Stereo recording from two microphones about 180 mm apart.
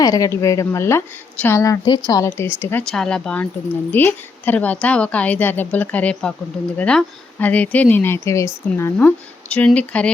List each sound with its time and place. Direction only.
0.0 s a woman's voice: 20° left (ahead or behind)
2.8 s a woman's voice: 5° left (ahead or behind)